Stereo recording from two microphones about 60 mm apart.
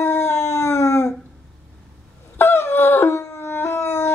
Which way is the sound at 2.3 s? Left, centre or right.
Left.